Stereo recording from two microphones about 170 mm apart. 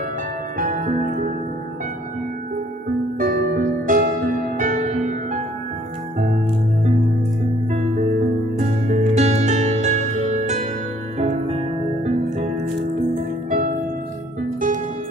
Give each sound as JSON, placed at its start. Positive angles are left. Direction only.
{"t": 0.6, "sound": "music", "side_deg": -55}
{"t": 3.2, "sound": "music", "side_deg": -55}
{"t": 7.7, "sound": "music", "side_deg": -40}